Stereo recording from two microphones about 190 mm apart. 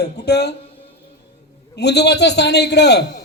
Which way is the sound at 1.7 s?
60° left (ahead or behind).